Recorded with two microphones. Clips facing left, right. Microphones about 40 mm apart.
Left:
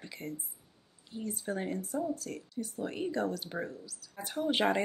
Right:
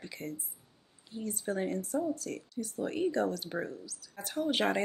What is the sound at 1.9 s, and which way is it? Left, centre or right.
Speech, centre.